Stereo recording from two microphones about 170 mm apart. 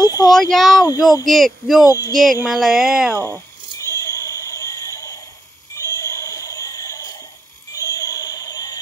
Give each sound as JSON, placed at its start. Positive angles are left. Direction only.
{"t": 0.0, "sound": "speech", "side_deg": 20}
{"t": 0.4, "sound": "speech", "side_deg": 0}
{"t": 0.7, "sound": "speech", "side_deg": 20}
{"t": 1.2, "sound": "speech", "side_deg": 0}
{"t": 1.9, "sound": "speech", "side_deg": 20}
{"t": 2.5, "sound": "speech", "side_deg": 0}
{"t": 3.8, "sound": "a sound", "side_deg": 15}